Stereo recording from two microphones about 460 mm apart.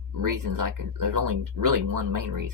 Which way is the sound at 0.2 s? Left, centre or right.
Right.